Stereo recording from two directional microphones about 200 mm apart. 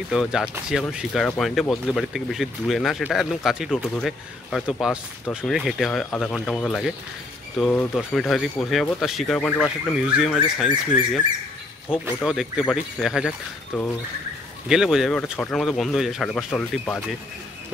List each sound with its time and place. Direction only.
0.1 s speech: 5° right (ahead or behind)
11.9 s speech: 5° right (ahead or behind)